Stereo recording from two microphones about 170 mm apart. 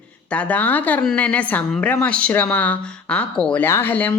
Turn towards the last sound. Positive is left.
turn(degrees=10)  # may be behind; listen again after turning